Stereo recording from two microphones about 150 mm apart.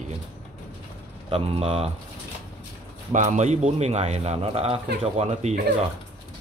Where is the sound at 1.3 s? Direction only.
40° right (ahead or behind).